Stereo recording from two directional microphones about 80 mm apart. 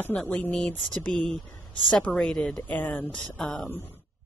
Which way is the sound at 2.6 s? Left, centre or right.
Left.